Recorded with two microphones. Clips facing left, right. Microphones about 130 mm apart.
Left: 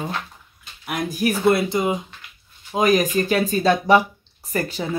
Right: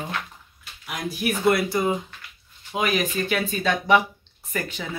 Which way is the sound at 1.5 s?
25° left (ahead or behind).